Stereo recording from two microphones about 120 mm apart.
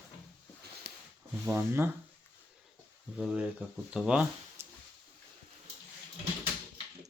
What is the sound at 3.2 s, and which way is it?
Speech, 5° right (ahead or behind).